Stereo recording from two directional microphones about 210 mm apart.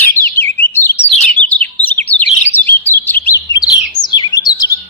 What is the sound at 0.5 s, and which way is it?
Chirp, 10° left (ahead or behind).